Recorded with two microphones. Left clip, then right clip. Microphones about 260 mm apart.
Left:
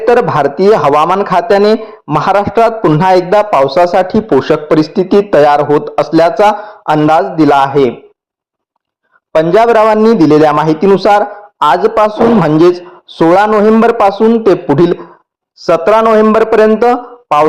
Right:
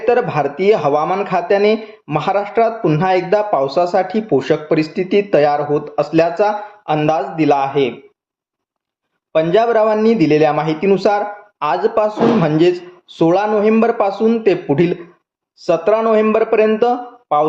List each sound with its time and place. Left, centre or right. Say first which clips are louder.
0.1 s a man's voice: left 6 dB; left
7.7 s a man's voice: left 7 dB; left
9.3 s a man's voice: left 6 dB; left